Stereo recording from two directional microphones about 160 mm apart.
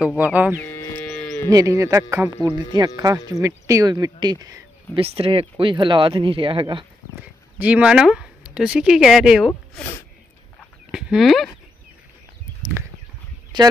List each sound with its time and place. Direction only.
0.0 s speech: 10° right (ahead or behind)
0.6 s livestock: 10° left (ahead or behind)
1.5 s speech: 20° right (ahead or behind)
4.9 s speech: 35° right (ahead or behind)
7.5 s speech: 10° right (ahead or behind)
9.5 s speech: 15° left (ahead or behind)
10.6 s livestock: 5° right (ahead or behind)